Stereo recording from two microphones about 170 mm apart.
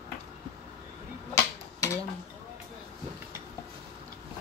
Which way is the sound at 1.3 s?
20° left (ahead or behind).